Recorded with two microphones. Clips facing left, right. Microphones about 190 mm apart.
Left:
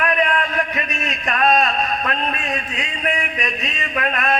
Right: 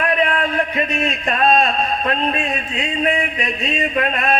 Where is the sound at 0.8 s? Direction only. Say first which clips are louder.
Right 6 dB; 30° right (ahead or behind).